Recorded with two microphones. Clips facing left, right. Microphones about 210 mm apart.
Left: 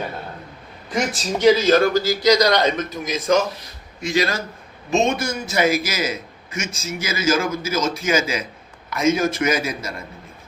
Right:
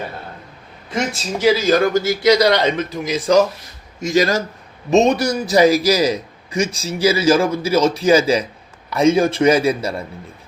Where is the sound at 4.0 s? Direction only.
45° right (ahead or behind).